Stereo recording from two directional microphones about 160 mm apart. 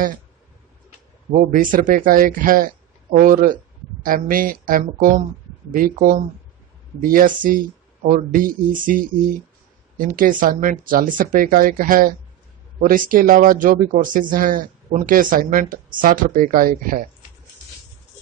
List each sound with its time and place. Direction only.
1.3 s a man's voice: 60° right (ahead or behind)